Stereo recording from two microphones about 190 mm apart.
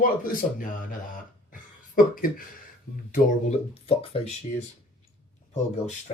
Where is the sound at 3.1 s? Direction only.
35° left (ahead or behind).